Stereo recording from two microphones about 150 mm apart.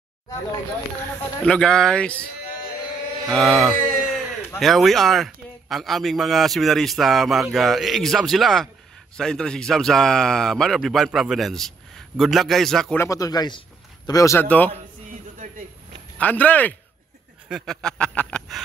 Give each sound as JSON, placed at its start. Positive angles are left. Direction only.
{"t": 0.9, "sound": "speech", "side_deg": 10}
{"t": 3.3, "sound": "a man's voice", "side_deg": 0}
{"t": 12.9, "sound": "speech", "side_deg": 20}
{"t": 15.0, "sound": "a sound", "side_deg": -60}
{"t": 16.2, "sound": "speech", "side_deg": 10}
{"t": 17.5, "sound": "a man's voice", "side_deg": 0}